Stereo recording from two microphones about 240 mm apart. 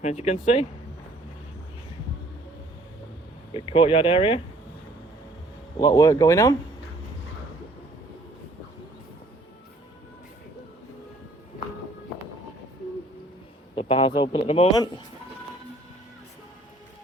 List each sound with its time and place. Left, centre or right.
0.0 s a man's voice: left
3.5 s a man's voice: left
5.8 s speech: centre
13.7 s a man's voice: left